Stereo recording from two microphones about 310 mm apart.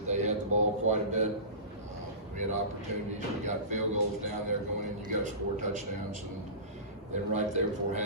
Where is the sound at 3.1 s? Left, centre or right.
Right.